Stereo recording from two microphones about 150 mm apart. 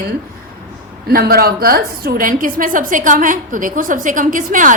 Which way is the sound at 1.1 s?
90° right.